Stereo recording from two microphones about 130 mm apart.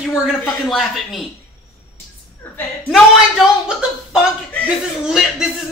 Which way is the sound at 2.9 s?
5° right (ahead or behind).